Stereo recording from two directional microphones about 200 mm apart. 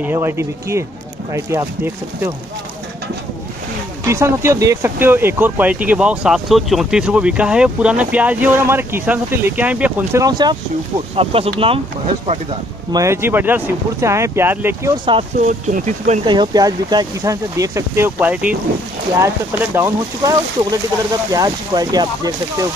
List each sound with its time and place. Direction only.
0.0 s speech: 10° right (ahead or behind)
4.0 s speech: 15° right (ahead or behind)
12.9 s speech: 15° right (ahead or behind)
15.4 s speech: 35° right (ahead or behind)
16.3 s speech: 20° right (ahead or behind)